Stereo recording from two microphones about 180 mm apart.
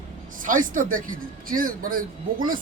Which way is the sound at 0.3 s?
50° right (ahead or behind).